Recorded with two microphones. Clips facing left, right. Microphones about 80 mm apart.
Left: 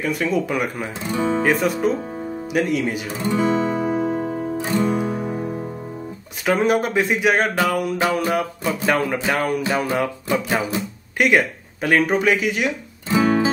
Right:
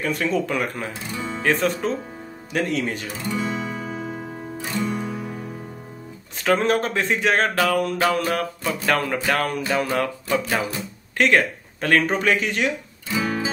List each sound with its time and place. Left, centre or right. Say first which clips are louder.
0.0 s speech: left 2 dB; centre
1.1 s music: left 12 dB; left
1.4 s speech: right 1 dB; centre
3.3 s music: left 8 dB; left
5.0 s music: left 6 dB; left
6.4 s speech: left 1 dB; centre